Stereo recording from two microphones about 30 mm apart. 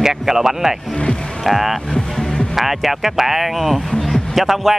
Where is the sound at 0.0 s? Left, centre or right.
Centre.